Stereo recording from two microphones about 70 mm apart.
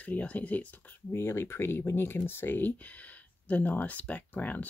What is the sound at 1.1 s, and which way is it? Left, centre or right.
Speech, left.